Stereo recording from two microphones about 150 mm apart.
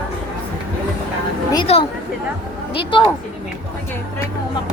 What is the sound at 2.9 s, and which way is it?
Speech, 35° left (ahead or behind).